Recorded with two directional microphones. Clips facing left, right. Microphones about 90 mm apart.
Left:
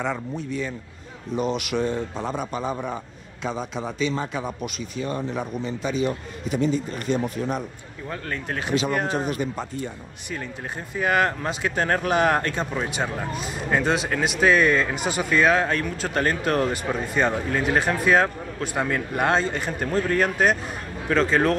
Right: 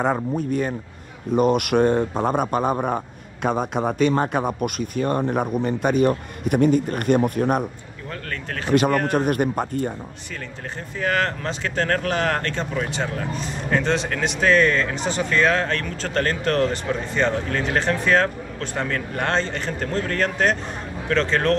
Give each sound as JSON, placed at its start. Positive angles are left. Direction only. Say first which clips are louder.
{"t": 0.0, "sound": "speech", "louder": "right 6 dB", "side_deg": -45}
{"t": 8.1, "sound": "speech", "louder": "left 1 dB", "side_deg": 15}
{"t": 8.7, "sound": "speech", "louder": "right 6 dB", "side_deg": -60}
{"t": 11.0, "sound": "speech", "louder": "left 1 dB", "side_deg": 15}